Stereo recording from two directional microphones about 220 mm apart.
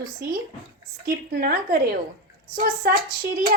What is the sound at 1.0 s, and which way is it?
Speech, 40° right (ahead or behind).